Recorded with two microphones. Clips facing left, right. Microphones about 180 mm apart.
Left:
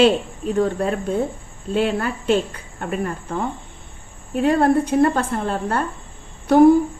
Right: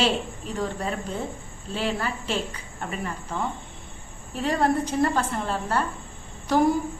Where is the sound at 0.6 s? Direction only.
55° left (ahead or behind).